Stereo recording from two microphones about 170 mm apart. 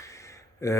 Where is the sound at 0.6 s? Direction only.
20° left (ahead or behind).